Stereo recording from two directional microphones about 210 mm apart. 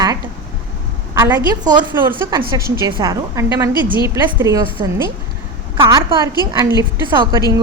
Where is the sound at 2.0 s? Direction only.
10° right (ahead or behind).